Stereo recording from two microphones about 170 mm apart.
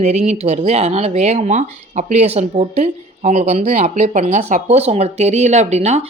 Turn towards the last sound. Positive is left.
turn(degrees=-40)  # may be behind; listen again after turning